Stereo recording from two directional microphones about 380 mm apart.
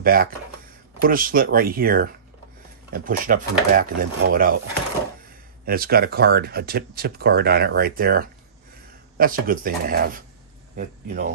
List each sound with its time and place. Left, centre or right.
0.0 s speech: right
5.7 s speech: right